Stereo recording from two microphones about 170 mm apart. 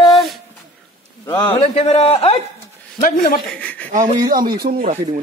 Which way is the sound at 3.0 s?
55° left (ahead or behind).